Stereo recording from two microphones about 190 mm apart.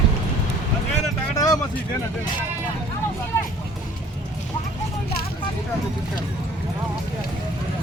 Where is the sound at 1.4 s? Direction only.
20° left (ahead or behind).